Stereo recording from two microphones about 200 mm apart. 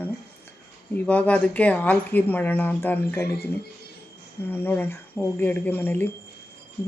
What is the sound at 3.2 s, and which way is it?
Speech, 50° left (ahead or behind).